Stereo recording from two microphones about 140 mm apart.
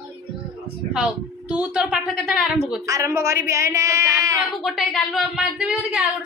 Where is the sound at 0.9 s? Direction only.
10° right (ahead or behind).